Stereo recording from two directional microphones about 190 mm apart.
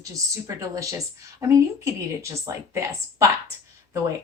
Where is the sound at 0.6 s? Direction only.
15° right (ahead or behind).